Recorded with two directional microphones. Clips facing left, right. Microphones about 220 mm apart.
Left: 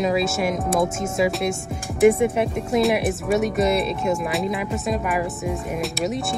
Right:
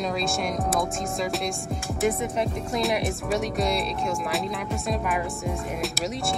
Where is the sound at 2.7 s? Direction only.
Centre (ahead or behind).